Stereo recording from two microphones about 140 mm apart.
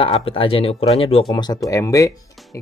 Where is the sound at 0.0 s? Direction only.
40° left (ahead or behind).